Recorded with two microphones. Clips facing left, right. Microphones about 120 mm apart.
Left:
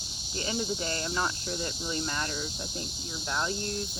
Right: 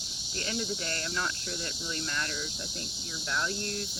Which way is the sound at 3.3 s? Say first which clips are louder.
Left 2 dB; 30° left (ahead or behind).